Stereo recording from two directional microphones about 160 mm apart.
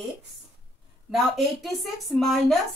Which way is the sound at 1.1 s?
Centre (ahead or behind).